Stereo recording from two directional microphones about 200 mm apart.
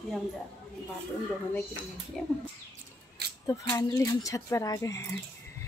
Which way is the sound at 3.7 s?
20° left (ahead or behind).